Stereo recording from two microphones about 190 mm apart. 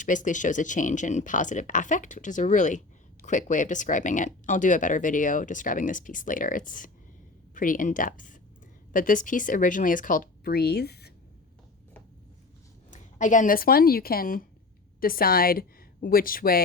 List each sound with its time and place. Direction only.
0.0 s speech: 40° left (ahead or behind)
12.9 s a woman's voice: 40° left (ahead or behind)